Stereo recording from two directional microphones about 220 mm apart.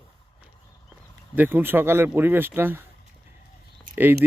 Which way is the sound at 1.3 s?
10° right (ahead or behind).